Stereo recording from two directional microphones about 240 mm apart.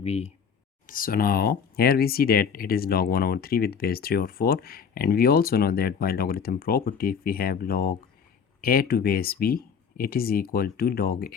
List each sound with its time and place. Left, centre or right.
0.0 s speech: left
0.9 s speech: left